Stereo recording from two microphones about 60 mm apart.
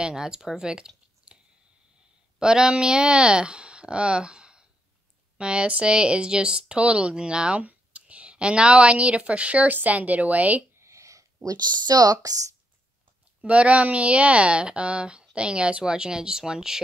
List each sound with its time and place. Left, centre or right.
0.0 s speech: centre
10.8 s a sound: right
12.1 s speech: right
13.4 s speech: right